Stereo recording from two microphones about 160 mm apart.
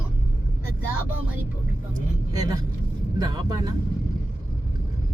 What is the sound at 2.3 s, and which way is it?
Music, 25° right (ahead or behind).